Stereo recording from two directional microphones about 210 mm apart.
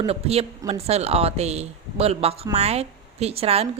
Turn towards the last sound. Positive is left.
turn(degrees=-30)  # may be behind; listen again after turning